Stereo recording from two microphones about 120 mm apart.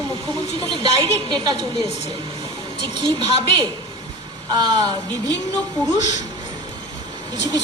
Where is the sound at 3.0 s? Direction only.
45° right (ahead or behind).